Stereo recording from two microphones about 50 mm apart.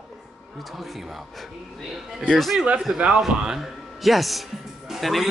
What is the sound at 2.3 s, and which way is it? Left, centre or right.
Speech, centre.